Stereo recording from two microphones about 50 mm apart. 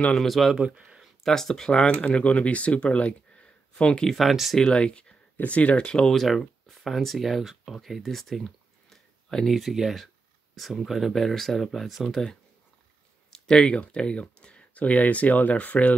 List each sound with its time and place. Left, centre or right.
0.2 s speech: centre
0.6 s speech: right
1.2 s speech: centre
4.1 s speech: centre
4.6 s speech: centre
6.7 s speech: centre
9.5 s speech: centre
13.3 s a sound: centre
13.7 s speech: left